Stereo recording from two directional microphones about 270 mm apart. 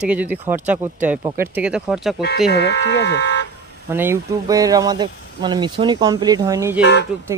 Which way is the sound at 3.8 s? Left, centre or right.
Centre.